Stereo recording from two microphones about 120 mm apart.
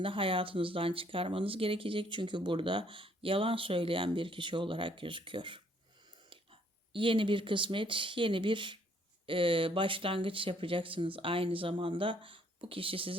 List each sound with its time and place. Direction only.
0.0 s speech: 45° right (ahead or behind)